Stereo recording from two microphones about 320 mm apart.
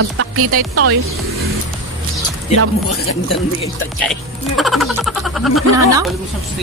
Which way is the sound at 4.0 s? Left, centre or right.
Centre.